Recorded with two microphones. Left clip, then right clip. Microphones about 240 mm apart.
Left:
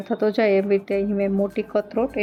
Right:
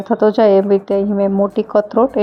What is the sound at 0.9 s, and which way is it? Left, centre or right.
Speech, centre.